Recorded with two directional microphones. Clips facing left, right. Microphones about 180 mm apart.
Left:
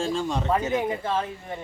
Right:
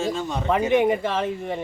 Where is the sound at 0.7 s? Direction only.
75° right (ahead or behind).